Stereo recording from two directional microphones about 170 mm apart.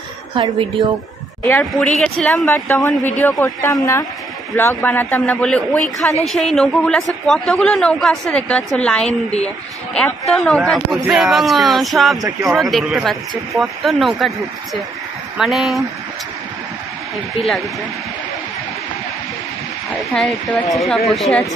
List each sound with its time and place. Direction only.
0.3 s a woman's voice: 30° right (ahead or behind)
1.4 s a man's voice: 10° left (ahead or behind)
20.7 s a man's voice: centre (ahead or behind)